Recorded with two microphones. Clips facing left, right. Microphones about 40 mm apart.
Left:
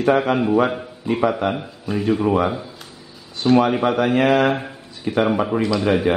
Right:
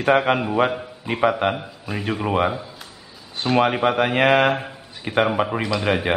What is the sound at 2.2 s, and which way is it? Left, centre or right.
Mantra, right.